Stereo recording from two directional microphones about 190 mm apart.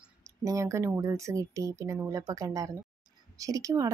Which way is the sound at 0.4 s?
15° right (ahead or behind).